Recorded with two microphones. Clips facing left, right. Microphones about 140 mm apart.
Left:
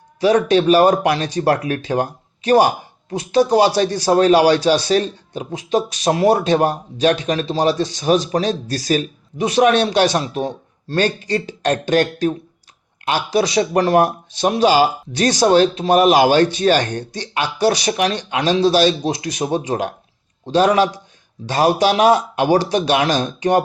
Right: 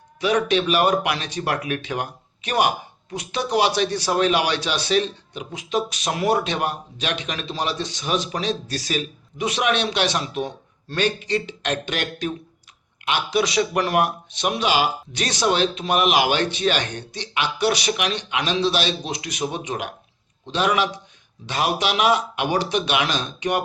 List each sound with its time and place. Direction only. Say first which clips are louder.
0.2 s speech: left 6 dB; 35° left (ahead or behind)